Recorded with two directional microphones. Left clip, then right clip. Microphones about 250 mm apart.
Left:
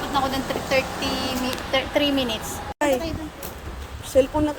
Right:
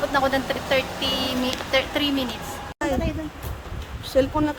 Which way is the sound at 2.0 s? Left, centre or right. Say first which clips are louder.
Left 2 dB; right.